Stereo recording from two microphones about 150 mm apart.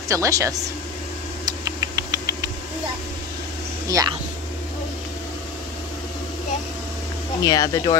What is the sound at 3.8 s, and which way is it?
Speech, 20° right (ahead or behind).